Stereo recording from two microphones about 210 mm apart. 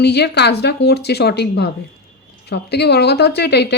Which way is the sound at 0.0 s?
50° left (ahead or behind).